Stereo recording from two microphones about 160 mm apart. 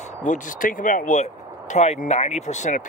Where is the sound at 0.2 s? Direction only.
55° left (ahead or behind).